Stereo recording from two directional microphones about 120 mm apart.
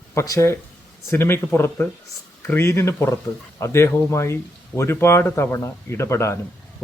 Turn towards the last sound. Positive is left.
turn(degrees=25)  # may be behind; listen again after turning